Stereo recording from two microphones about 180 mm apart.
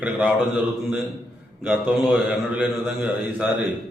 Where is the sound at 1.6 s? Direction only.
5° right (ahead or behind).